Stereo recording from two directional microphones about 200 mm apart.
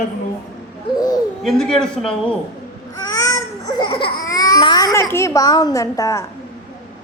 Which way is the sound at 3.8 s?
25° left (ahead or behind).